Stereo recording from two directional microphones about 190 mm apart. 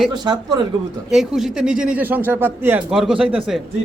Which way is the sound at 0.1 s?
20° right (ahead or behind).